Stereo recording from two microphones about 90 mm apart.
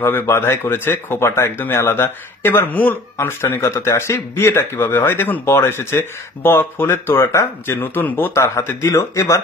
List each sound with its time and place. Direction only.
0.0 s speech: 25° left (ahead or behind)